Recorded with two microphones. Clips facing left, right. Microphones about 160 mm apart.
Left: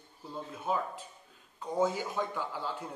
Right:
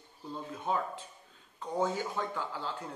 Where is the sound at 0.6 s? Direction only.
5° left (ahead or behind).